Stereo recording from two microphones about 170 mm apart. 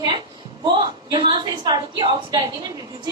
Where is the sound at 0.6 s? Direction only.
25° right (ahead or behind).